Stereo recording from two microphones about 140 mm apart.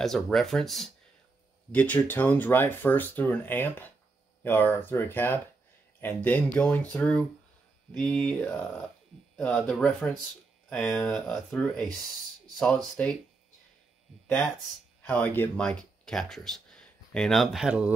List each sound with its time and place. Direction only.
0.0 s speech: centre (ahead or behind)
15.0 s speech: 10° left (ahead or behind); by 17.9 s 5° right (ahead or behind)